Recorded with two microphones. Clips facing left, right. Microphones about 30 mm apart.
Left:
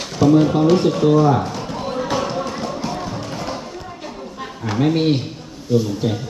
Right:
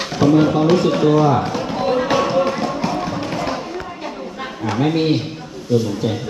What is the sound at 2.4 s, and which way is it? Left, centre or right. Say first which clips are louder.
Music: right 5 dB; right.